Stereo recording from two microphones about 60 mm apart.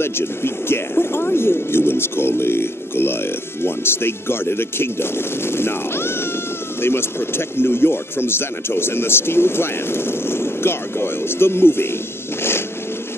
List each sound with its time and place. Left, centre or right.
0.0 s speech: left